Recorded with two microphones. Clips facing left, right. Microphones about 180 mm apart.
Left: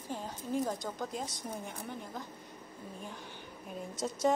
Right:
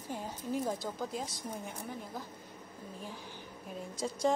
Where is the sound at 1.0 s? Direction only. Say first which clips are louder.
Even; centre (ahead or behind).